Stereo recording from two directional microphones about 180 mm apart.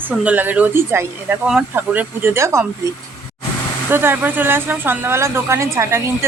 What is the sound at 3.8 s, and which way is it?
Speech, 10° right (ahead or behind).